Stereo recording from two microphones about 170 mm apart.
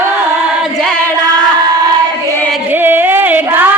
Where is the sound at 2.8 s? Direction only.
10° right (ahead or behind).